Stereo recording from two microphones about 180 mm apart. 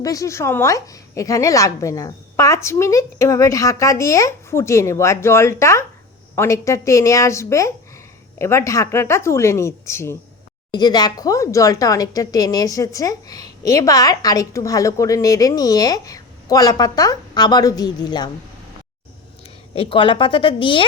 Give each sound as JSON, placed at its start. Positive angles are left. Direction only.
{"t": 0.0, "sound": "a woman's voice", "side_deg": 20}
{"t": 19.7, "sound": "a woman's voice", "side_deg": 30}